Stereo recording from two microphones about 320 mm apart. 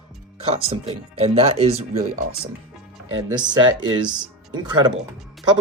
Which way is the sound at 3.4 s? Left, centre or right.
Centre.